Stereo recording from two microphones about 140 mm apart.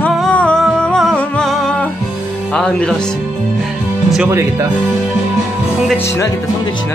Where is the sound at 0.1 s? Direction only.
5° left (ahead or behind).